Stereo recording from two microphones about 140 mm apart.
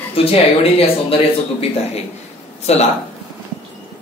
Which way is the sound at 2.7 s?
50° left (ahead or behind).